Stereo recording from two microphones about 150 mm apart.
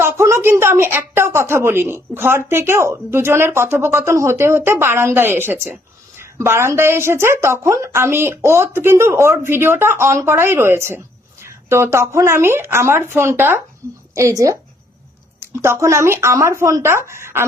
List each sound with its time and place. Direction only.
0.0 s a woman's voice: 15° right (ahead or behind)
15.6 s a woman's voice: 20° right (ahead or behind)